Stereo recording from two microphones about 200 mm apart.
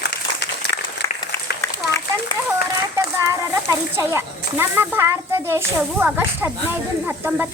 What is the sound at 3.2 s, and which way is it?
Speech, 15° right (ahead or behind).